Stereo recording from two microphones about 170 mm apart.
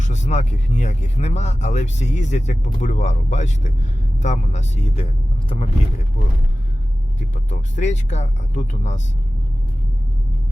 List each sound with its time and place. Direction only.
0.0 s speech: 45° left (ahead or behind)
7.2 s speech: 45° left (ahead or behind)